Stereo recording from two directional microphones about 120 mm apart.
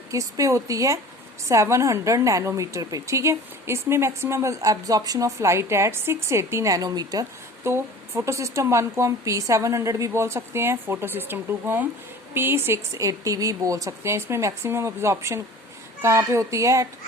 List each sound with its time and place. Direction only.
0.1 s a woman's voice: 25° right (ahead or behind)
7.6 s a woman's voice: 20° right (ahead or behind)